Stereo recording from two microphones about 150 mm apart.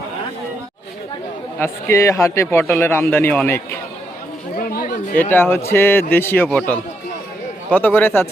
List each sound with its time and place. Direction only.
1.5 s a man's voice: 15° left (ahead or behind)
4.5 s a sound: 75° left (ahead or behind)
5.3 s a man's voice: 15° left (ahead or behind)
7.7 s a man's voice: 10° left (ahead or behind)